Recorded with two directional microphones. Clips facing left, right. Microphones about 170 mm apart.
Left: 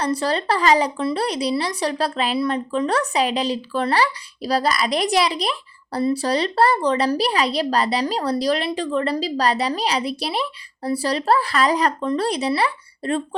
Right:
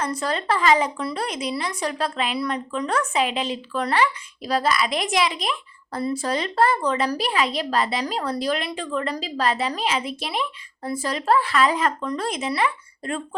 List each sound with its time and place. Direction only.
0.0 s a woman's voice: 35° left (ahead or behind)